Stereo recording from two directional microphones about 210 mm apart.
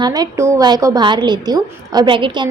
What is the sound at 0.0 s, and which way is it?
A woman's voice, 15° right (ahead or behind).